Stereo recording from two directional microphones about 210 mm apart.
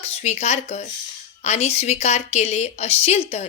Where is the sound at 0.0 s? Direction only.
30° left (ahead or behind).